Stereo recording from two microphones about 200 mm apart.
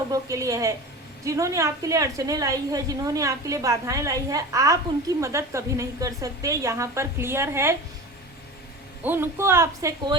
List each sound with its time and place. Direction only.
0.1 s a woman's voice: 15° right (ahead or behind)
9.0 s a woman's voice: 10° right (ahead or behind)